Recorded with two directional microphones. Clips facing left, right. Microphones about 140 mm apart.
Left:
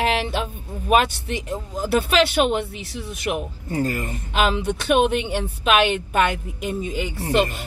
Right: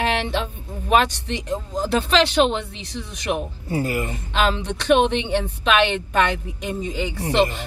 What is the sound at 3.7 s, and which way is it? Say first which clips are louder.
Speech: even; 15° right (ahead or behind).